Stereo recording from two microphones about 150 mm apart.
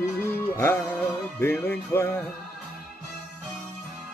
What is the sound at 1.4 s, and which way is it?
Speech, 15° left (ahead or behind).